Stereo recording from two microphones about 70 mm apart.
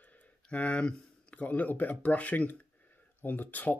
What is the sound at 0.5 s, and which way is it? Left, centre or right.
Speech, centre.